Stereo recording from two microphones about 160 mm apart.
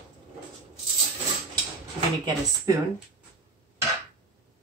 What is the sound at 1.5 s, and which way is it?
Dishes, 25° right (ahead or behind).